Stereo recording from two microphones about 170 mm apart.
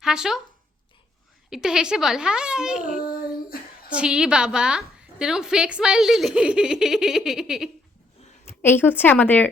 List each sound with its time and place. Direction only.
0.0 s speech: 5° right (ahead or behind)
1.5 s a woman's voice: 5° right (ahead or behind)
3.0 s child singing: 60° left (ahead or behind)
3.8 s a woman's voice: 5° right (ahead or behind)
8.4 s a woman's voice: 10° left (ahead or behind)